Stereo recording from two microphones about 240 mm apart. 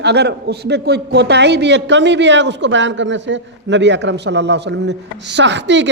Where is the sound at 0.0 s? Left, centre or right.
Right.